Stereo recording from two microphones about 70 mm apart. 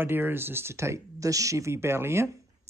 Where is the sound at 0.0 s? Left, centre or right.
Right.